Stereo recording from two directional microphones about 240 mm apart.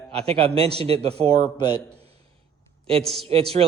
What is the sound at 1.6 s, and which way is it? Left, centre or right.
Speech, centre.